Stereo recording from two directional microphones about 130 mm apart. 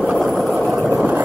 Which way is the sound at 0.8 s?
10° right (ahead or behind).